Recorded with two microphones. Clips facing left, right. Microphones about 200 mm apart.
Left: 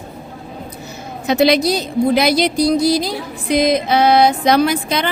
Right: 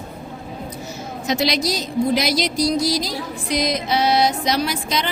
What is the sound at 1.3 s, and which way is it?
Speech, 60° left (ahead or behind).